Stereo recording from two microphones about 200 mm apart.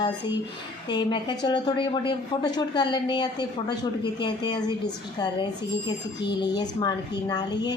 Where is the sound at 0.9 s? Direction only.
25° left (ahead or behind).